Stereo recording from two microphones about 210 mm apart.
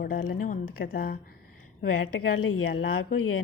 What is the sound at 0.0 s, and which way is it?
Speech, 45° left (ahead or behind).